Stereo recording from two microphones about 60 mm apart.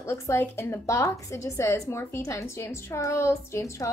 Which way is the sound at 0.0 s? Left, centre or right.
Left.